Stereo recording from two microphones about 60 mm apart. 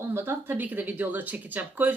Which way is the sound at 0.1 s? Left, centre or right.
Right.